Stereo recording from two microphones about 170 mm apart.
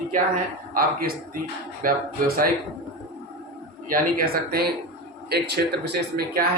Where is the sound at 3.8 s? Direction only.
55° right (ahead or behind).